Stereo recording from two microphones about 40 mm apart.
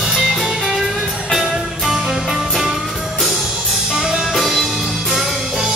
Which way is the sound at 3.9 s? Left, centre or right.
Centre.